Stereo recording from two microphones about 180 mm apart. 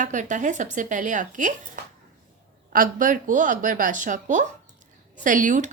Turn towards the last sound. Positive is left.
turn(degrees=-45)  # may be behind; listen again after turning